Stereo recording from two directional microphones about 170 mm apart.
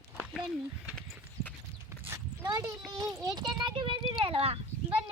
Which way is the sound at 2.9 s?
20° right (ahead or behind).